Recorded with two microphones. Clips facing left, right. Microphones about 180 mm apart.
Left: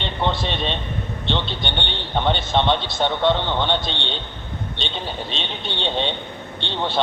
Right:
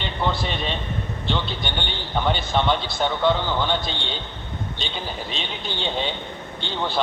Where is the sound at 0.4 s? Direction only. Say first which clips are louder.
Left 2 dB; 25° left (ahead or behind).